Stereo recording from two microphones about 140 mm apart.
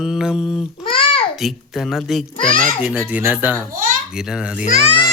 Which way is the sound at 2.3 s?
40° left (ahead or behind).